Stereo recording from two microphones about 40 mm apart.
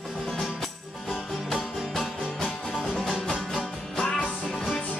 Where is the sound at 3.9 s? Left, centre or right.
Left.